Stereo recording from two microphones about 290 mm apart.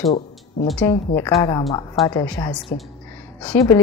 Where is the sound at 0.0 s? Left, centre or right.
Left.